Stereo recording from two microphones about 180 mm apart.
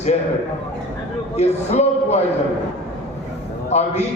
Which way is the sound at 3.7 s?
40° left (ahead or behind).